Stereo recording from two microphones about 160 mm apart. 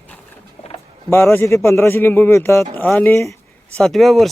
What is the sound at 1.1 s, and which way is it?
Speech, 15° left (ahead or behind).